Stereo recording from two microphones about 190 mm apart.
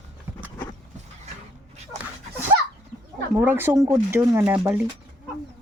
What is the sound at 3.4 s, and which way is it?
Speech, 10° right (ahead or behind).